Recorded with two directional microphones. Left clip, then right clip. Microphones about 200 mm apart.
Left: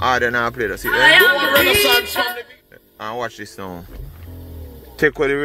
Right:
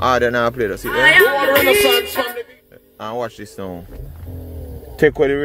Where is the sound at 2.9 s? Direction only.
20° right (ahead or behind).